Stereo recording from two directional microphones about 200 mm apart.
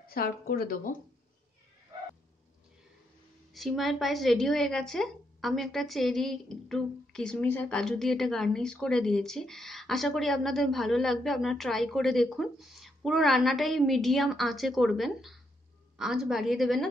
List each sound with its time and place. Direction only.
0.0 s speech: 50° left (ahead or behind)
3.5 s a woman's voice: centre (ahead or behind)